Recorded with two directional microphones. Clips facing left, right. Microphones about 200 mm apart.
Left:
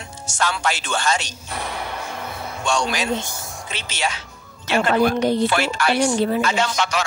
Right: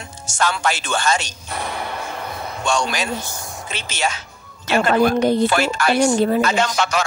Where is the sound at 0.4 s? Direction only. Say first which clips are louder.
Right 2 dB; 45° right (ahead or behind).